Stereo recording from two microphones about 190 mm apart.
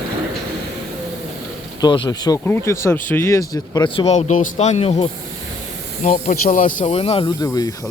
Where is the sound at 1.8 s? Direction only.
20° left (ahead or behind).